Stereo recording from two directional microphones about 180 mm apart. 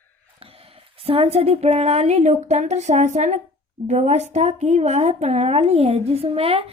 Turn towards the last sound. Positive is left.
turn(degrees=-30)  # may be behind; listen again after turning